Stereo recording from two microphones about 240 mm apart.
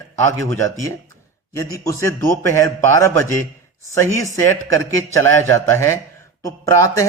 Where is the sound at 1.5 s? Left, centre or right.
Centre.